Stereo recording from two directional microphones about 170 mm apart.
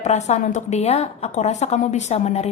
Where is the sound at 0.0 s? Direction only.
40° left (ahead or behind).